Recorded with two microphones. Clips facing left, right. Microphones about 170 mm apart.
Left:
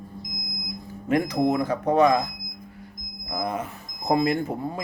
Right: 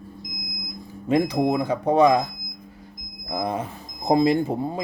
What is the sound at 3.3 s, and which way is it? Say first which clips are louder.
Speech: right 2 dB; 25° right (ahead or behind).